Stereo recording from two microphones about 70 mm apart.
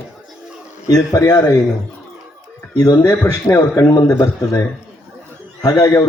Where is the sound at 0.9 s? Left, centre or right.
Left.